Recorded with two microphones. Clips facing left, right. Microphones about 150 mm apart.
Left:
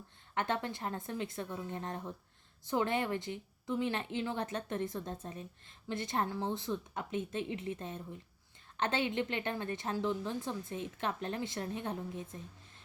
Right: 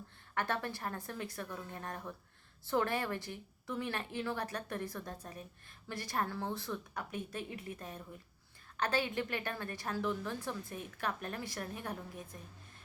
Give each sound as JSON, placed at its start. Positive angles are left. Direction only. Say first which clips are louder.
{"t": 0.3, "sound": "a woman's voice", "louder": "left 2 dB", "side_deg": 20}